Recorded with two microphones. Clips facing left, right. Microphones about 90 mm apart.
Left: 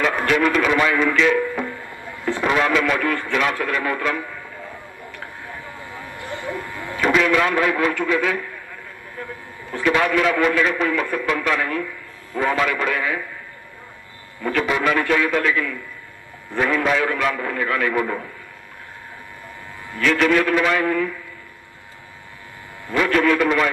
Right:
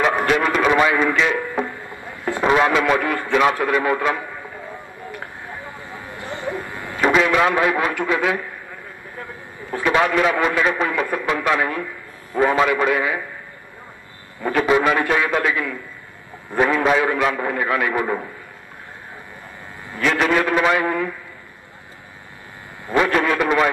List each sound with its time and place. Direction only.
0.0 s speech: 20° right (ahead or behind)
5.5 s a sound: 20° right (ahead or behind)
7.9 s a man's voice: 20° right (ahead or behind)
9.7 s a man's voice: 20° right (ahead or behind)
14.4 s a man's voice: 25° right (ahead or behind)
19.9 s a man's voice: 20° right (ahead or behind)
22.8 s a man's voice: 25° right (ahead or behind)